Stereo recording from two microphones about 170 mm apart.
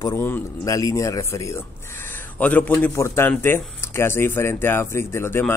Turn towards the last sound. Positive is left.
turn(degrees=15)  # may be behind; listen again after turning